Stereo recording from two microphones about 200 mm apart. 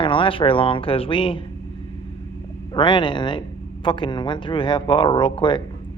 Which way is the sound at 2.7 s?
25° left (ahead or behind).